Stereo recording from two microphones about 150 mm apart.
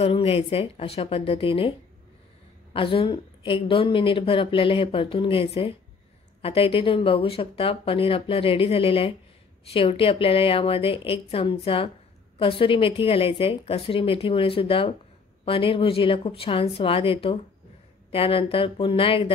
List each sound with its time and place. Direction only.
0.0 s a woman's voice: 40° left (ahead or behind)